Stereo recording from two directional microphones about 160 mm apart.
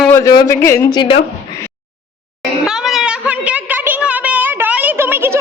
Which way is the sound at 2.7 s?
5° right (ahead or behind).